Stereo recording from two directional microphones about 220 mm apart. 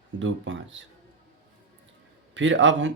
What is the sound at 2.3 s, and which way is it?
Speech, 55° right (ahead or behind).